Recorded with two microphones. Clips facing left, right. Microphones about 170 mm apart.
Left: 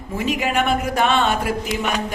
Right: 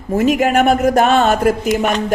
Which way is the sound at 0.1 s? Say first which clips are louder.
Right 8 dB; 45° right (ahead or behind).